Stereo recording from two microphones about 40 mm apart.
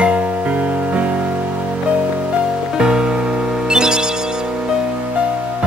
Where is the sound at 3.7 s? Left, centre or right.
Centre.